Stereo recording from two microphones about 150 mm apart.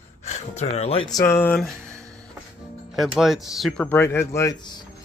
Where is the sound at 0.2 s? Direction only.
50° left (ahead or behind).